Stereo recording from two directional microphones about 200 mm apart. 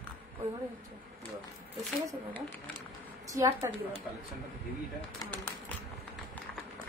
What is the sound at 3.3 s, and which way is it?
Speech, 15° right (ahead or behind).